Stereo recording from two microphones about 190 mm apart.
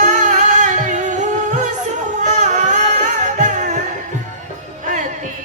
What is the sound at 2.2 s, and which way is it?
Music, 40° right (ahead or behind).